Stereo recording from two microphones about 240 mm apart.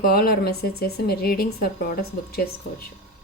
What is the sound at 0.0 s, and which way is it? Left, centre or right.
Speech, left.